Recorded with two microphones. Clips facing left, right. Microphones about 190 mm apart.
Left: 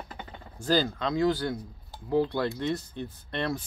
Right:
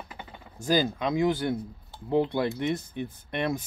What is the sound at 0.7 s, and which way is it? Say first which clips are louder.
Speech: right 1 dB; 15° right (ahead or behind).